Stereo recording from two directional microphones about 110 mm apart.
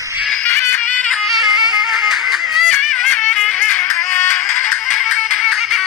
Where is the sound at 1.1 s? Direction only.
Centre (ahead or behind).